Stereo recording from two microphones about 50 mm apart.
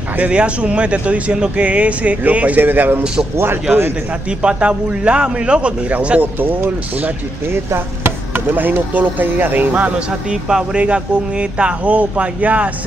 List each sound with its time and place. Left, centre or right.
0.2 s speech: right
4.4 s speech: right
6.4 s speech: right
7.7 s a sound: right
8.5 s speech: right
10.3 s speech: centre
10.8 s speech: right